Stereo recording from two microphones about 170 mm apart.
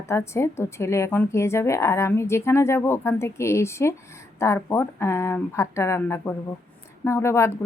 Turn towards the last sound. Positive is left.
turn(degrees=15)  # may be behind; listen again after turning